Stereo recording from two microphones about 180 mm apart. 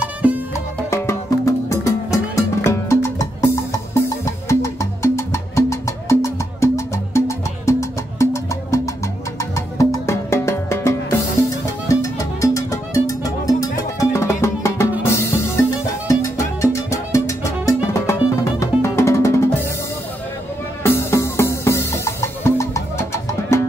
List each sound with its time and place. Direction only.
0.8 s music: 15° left (ahead or behind)
16.9 s music: 15° left (ahead or behind)
20.8 s music: 15° left (ahead or behind)